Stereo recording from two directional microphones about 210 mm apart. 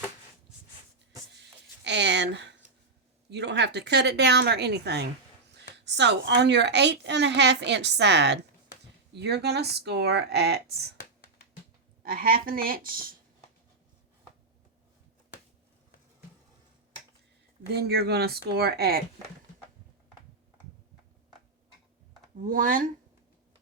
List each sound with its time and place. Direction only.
1.8 s a woman's voice: 55° right (ahead or behind)
12.0 s speech: 45° right (ahead or behind)
17.7 s speech: 50° right (ahead or behind)
22.4 s speech: 40° right (ahead or behind)